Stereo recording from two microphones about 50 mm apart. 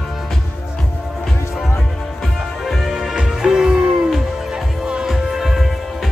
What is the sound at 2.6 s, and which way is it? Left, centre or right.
Music, centre.